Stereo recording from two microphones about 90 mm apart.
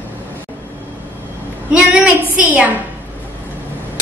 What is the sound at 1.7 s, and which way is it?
A woman's voice, 15° right (ahead or behind).